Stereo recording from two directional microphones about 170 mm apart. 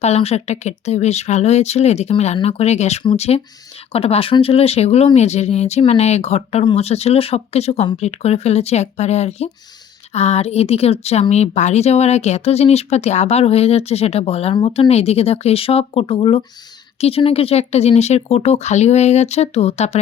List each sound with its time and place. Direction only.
0.0 s speech: 40° left (ahead or behind)